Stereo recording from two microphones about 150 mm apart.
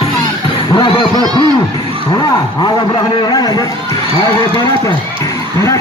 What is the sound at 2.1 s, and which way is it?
A man's voice, 25° left (ahead or behind).